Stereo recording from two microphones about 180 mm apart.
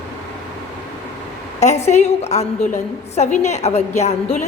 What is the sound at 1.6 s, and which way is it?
A woman's voice, 40° left (ahead or behind).